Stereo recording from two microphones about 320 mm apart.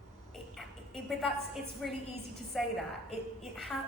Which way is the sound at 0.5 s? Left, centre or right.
Centre.